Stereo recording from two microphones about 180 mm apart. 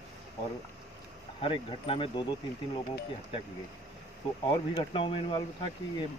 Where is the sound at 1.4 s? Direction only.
30° left (ahead or behind).